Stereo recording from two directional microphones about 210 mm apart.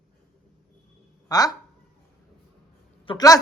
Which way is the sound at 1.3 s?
20° left (ahead or behind).